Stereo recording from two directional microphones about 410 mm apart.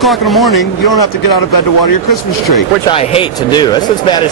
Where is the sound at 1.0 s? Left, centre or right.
Left.